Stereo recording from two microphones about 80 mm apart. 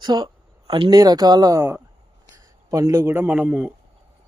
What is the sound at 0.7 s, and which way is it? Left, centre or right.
Speech, right.